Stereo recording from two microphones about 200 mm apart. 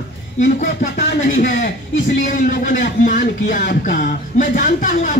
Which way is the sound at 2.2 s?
40° left (ahead or behind).